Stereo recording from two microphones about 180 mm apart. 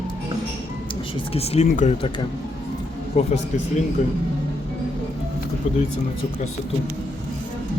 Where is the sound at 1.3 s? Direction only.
35° left (ahead or behind).